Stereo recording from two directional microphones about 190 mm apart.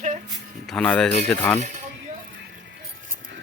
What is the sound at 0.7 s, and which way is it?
Speech, 5° left (ahead or behind).